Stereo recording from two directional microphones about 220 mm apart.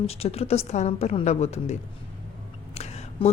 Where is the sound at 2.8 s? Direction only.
30° left (ahead or behind).